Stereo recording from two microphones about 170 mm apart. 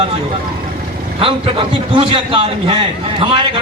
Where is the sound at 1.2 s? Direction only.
30° right (ahead or behind).